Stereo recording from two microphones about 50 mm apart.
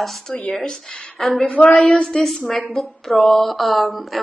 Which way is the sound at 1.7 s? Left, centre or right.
Centre.